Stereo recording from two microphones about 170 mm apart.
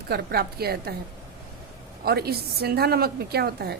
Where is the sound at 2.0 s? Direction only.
65° right (ahead or behind).